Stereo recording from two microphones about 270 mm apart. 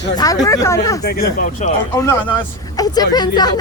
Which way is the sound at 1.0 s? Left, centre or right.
Left.